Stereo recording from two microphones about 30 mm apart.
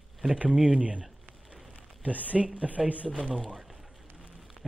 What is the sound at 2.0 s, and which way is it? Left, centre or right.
Mantra, right.